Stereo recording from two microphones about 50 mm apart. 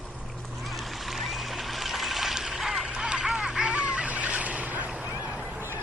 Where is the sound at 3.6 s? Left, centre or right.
Right.